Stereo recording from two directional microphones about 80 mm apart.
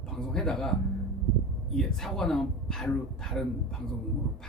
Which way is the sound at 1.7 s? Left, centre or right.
Centre.